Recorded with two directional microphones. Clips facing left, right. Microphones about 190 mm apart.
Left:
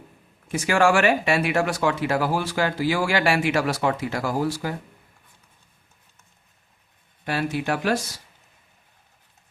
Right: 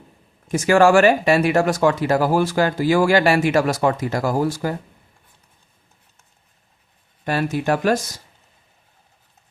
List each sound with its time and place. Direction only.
0.4 s speech: 45° right (ahead or behind)
7.3 s speech: 45° right (ahead or behind)